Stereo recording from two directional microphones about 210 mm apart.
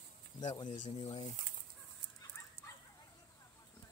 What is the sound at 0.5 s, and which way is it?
Speech, 20° left (ahead or behind).